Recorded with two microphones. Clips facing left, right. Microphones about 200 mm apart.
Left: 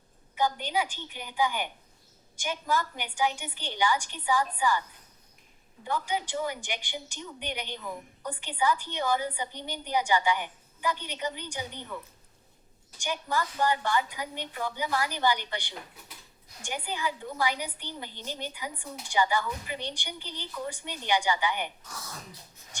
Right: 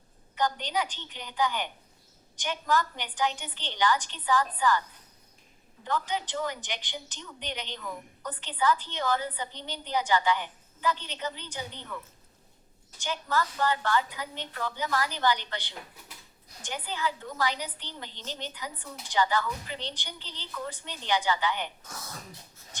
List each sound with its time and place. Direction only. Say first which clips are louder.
0.3 s a woman's voice: left 1 dB; 10° left (ahead or behind)
5.8 s a woman's voice: even; 10° left (ahead or behind)
13.0 s a woman's voice: right 1 dB; 15° left (ahead or behind)